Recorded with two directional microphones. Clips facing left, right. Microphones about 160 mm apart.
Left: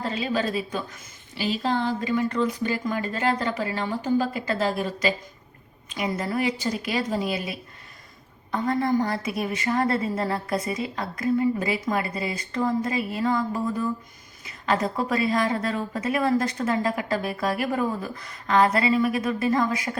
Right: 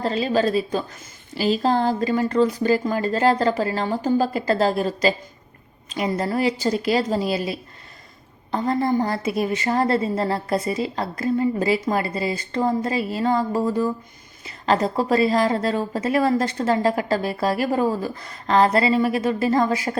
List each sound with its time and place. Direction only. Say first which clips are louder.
0.0 s a woman's voice: right 6 dB; 35° right (ahead or behind)